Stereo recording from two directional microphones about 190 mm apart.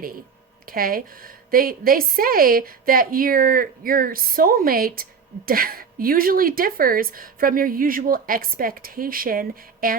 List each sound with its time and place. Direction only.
0.6 s a woman's voice: 50° right (ahead or behind)